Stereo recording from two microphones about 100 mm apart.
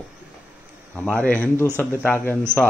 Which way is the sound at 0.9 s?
15° left (ahead or behind).